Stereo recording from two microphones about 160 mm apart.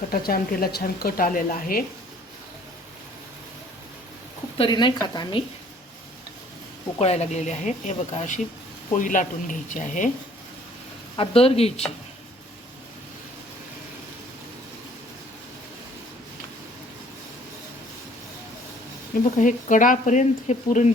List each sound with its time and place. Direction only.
0.1 s a woman's voice: 70° left (ahead or behind)
4.5 s speech: 30° left (ahead or behind)
7.0 s speech: 45° left (ahead or behind)
11.2 s a woman's voice: 35° left (ahead or behind)
19.2 s speech: 50° left (ahead or behind)